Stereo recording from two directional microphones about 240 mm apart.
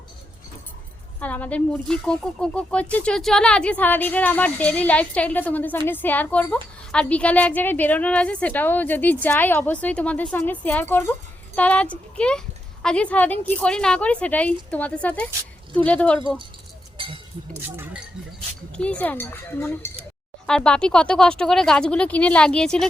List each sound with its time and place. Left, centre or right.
1.2 s a woman's voice: centre
17.0 s a sound: right
17.7 s a woman's voice: centre